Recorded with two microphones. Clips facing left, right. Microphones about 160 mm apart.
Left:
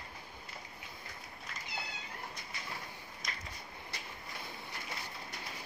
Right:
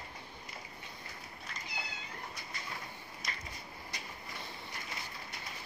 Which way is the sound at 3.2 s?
5° right (ahead or behind).